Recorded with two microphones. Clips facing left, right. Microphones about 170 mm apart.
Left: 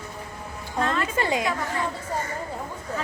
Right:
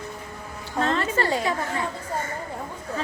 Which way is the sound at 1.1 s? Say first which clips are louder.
Right 1 dB; 15° left (ahead or behind).